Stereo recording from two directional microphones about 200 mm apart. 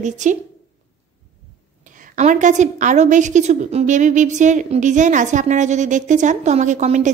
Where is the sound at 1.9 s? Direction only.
40° right (ahead or behind).